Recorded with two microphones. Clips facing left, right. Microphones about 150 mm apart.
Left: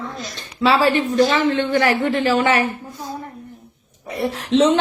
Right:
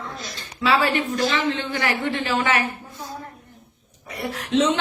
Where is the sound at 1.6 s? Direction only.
55° left (ahead or behind).